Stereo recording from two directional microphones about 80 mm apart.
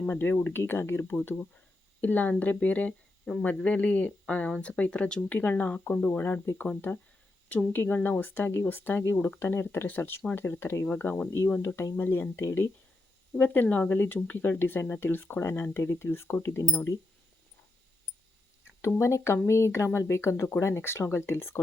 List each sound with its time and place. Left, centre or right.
0.1 s speech: left
7.7 s speech: left
10.8 s speech: centre
11.3 s speech: left
18.9 s speech: left